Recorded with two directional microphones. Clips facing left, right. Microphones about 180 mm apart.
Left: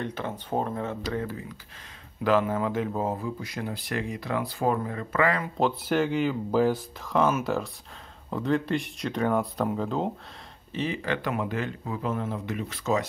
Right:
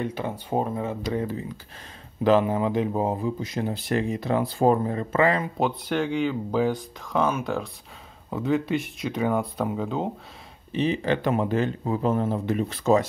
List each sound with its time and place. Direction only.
0.0 s speech: 10° right (ahead or behind)
5.6 s speech: centre (ahead or behind)
10.7 s speech: 20° right (ahead or behind)